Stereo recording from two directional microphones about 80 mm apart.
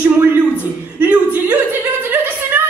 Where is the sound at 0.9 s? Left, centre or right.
Centre.